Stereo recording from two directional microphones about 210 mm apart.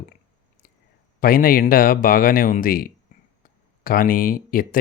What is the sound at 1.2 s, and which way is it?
Speech, 45° left (ahead or behind).